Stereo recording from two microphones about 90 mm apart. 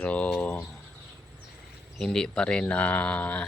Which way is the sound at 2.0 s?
5° left (ahead or behind).